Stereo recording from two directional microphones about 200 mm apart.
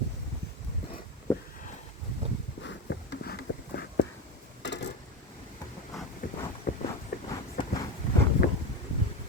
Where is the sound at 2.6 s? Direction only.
55° left (ahead or behind).